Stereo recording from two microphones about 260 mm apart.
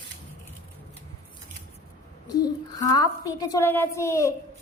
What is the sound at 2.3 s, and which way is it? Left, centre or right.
A woman's voice, centre.